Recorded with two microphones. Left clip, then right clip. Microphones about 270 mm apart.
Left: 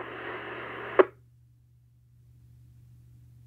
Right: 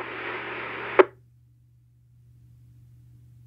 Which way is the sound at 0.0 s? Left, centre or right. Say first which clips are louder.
Right 5 dB; centre.